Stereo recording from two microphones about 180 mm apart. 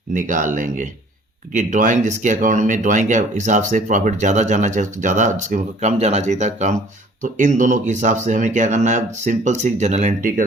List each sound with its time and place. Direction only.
0.1 s speech: 45° right (ahead or behind)